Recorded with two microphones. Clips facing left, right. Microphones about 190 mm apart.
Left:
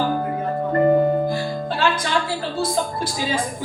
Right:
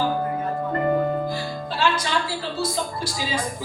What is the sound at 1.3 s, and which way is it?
Music, 50° left (ahead or behind).